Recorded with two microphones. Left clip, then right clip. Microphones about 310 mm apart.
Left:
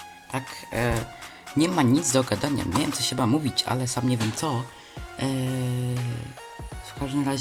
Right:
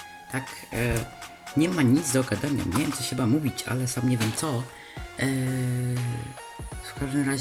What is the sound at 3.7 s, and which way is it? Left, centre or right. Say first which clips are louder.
Speech: left 2 dB; centre.